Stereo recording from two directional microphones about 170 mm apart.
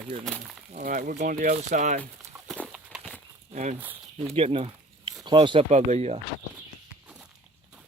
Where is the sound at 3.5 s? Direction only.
45° right (ahead or behind).